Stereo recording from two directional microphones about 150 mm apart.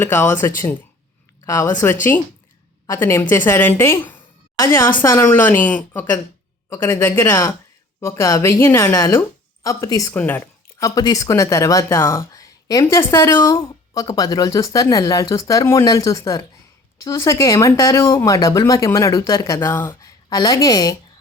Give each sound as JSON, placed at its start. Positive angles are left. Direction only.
{"t": 0.0, "sound": "speech", "side_deg": 10}
{"t": 2.8, "sound": "speech", "side_deg": 20}
{"t": 10.2, "sound": "speech", "side_deg": 10}